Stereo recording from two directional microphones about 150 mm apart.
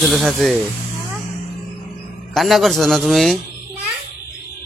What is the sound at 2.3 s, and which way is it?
A man's voice, centre (ahead or behind).